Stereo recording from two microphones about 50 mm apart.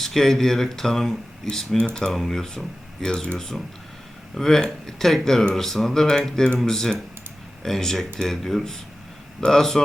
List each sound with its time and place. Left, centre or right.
0.0 s speech: centre
2.1 s speech: centre